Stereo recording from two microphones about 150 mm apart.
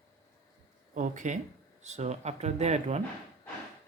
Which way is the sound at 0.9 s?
55° right (ahead or behind).